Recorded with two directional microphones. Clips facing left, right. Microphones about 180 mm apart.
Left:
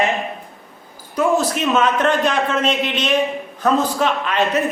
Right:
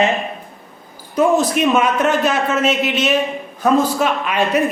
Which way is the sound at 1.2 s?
15° right (ahead or behind).